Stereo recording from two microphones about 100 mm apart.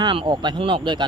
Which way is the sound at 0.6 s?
60° right (ahead or behind).